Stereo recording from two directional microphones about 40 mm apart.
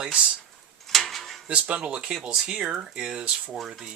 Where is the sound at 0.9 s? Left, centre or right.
Centre.